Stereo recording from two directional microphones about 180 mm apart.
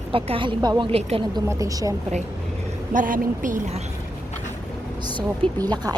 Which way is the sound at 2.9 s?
45° right (ahead or behind).